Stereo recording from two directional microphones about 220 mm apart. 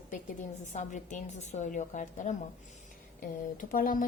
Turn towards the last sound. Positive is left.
turn(degrees=40)  # may be behind; listen again after turning